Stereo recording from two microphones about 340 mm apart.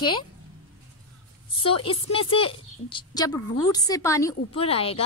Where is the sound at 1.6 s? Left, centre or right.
Centre.